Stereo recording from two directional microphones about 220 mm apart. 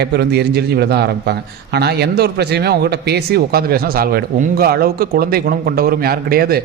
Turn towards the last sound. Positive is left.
turn(degrees=-45)  # may be behind; listen again after turning